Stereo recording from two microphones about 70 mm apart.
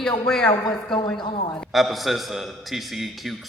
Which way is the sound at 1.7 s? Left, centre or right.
Centre.